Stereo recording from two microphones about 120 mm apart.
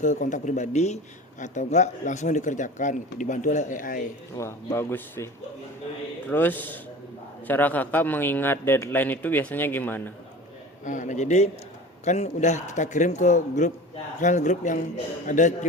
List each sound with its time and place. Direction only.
0.0 s speech: 90° left
4.4 s speech: 20° left (ahead or behind)
6.3 s a man's voice: 15° left (ahead or behind)
10.8 s a man's voice: 90° left